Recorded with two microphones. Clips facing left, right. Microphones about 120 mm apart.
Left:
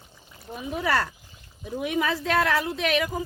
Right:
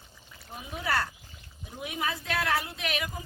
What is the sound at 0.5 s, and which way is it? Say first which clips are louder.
Speech: left 5 dB; 90° left.